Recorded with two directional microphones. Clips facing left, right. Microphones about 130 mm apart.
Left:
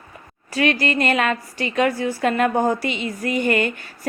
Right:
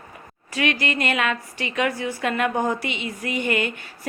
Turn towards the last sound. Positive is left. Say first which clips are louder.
# left 4 dB
turn(degrees=45)  # may be behind; listen again after turning